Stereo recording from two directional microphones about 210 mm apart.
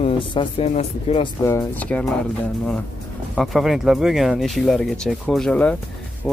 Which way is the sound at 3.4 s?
Centre (ahead or behind).